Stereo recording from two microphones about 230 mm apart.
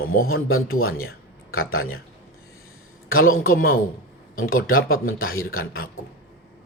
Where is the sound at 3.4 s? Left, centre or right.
Left.